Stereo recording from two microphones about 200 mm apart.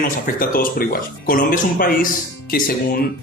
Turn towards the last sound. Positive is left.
turn(degrees=50)  # may be behind; listen again after turning